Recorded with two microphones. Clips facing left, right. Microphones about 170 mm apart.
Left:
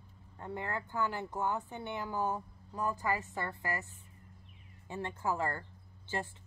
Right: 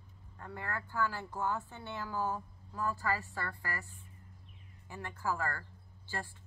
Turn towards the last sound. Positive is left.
turn(degrees=20)  # may be behind; listen again after turning